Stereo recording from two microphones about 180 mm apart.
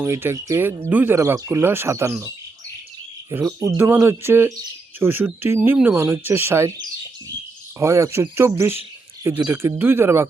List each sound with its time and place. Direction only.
0.0 s speech: 15° right (ahead or behind)